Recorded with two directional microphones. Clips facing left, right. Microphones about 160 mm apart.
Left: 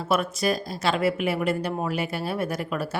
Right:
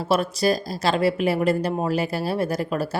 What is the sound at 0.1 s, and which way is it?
A woman's voice, 35° right (ahead or behind).